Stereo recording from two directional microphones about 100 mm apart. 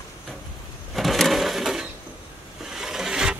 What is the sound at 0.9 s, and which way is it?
Sewing machine, centre (ahead or behind).